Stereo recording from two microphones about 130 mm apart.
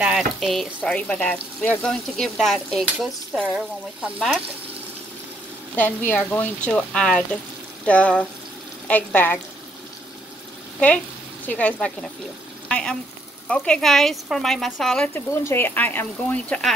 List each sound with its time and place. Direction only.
0.0 s speech: 5° right (ahead or behind)
3.4 s speech: 10° right (ahead or behind)
5.8 s speech: 15° left (ahead or behind)
11.4 s speech: 10° left (ahead or behind)
15.1 s speech: 15° left (ahead or behind)